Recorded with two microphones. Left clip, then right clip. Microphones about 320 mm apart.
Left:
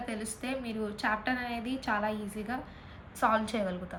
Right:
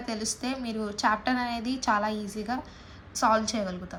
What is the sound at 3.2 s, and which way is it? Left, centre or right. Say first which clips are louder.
Speech: right 3 dB; centre.